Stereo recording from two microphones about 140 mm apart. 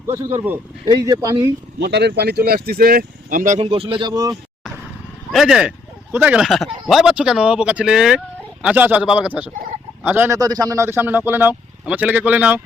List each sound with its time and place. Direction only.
0.1 s a man's voice: 15° right (ahead or behind)
0.9 s speech: 25° right (ahead or behind)
2.4 s speech: 90° right; by 3.6 s 65° right (ahead or behind)
3.6 s speech: 40° right (ahead or behind)
5.3 s a man's voice: centre (ahead or behind)